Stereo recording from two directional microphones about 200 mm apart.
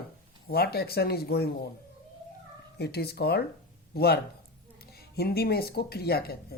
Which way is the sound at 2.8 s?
55° left (ahead or behind).